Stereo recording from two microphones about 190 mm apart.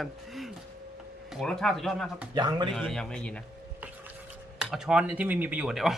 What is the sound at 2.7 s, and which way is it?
Speech, 5° left (ahead or behind).